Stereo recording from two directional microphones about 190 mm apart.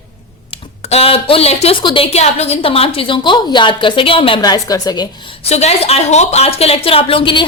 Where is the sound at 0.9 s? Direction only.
30° left (ahead or behind).